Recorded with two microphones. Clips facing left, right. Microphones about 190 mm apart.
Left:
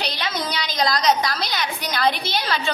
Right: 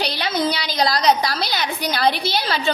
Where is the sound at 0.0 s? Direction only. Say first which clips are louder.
Right 5 dB; 30° right (ahead or behind).